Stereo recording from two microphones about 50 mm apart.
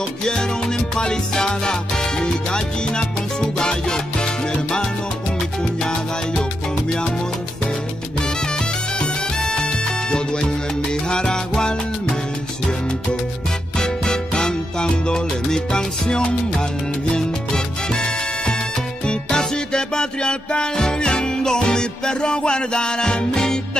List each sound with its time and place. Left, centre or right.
0.2 s music: centre
5.6 s salsa music: centre
8.2 s music: centre
13.7 s music: centre
17.1 s salsa music: centre
19.0 s music: centre